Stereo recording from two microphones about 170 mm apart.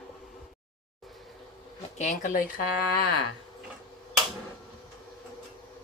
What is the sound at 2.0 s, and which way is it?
Speech, 45° left (ahead or behind).